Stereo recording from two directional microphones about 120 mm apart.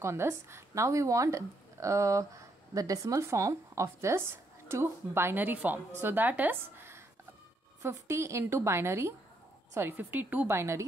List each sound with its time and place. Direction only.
0.0 s speech: 20° right (ahead or behind)